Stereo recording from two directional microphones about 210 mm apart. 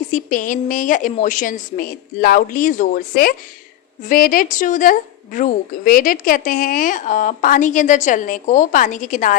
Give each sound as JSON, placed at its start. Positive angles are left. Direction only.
{"t": 0.1, "sound": "a woman's voice", "side_deg": 40}